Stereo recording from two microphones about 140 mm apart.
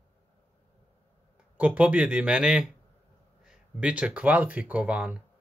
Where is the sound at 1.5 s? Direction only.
10° right (ahead or behind).